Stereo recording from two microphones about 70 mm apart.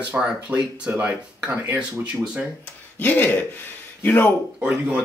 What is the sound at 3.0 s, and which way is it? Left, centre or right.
Speech, left.